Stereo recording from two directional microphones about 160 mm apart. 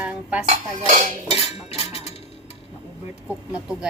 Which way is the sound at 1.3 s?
40° left (ahead or behind).